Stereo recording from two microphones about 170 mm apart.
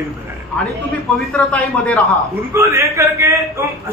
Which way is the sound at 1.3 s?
5° left (ahead or behind).